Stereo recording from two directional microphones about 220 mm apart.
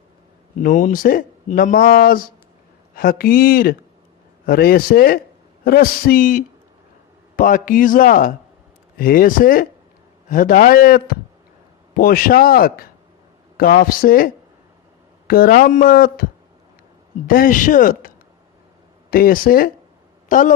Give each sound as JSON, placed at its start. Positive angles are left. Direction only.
{"t": 0.6, "sound": "speech", "side_deg": 35}
{"t": 15.3, "sound": "speech", "side_deg": 40}
{"t": 17.2, "sound": "speech", "side_deg": 40}
{"t": 19.1, "sound": "speech", "side_deg": 40}